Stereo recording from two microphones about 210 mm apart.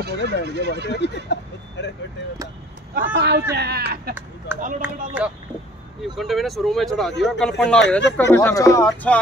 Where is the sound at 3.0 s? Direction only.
55° right (ahead or behind).